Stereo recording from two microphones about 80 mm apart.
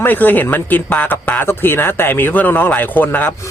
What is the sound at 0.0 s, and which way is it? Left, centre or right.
Speech, left.